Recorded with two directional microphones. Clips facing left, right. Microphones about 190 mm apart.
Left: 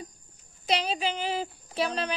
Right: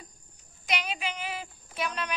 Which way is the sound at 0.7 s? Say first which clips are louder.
Left 5 dB; 30° left (ahead or behind).